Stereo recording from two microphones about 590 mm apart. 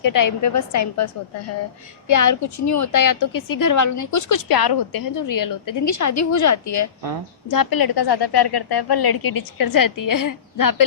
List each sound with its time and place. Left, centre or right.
0.0 s a woman's voice: left